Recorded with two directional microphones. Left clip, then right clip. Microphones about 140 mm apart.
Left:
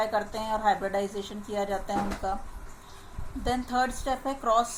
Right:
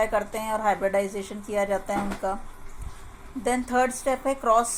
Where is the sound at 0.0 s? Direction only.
40° right (ahead or behind).